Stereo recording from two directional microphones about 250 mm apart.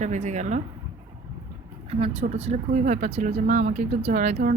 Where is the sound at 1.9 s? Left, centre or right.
Right.